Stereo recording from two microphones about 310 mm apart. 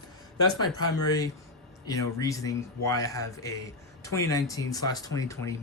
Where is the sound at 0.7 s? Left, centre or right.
Left.